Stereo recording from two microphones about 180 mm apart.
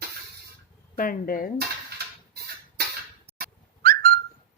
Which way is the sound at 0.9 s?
50° left (ahead or behind).